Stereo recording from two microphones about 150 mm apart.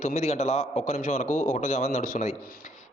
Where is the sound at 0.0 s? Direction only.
50° left (ahead or behind).